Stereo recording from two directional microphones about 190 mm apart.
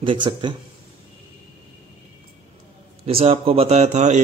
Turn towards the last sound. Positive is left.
turn(degrees=-35)  # may be behind; listen again after turning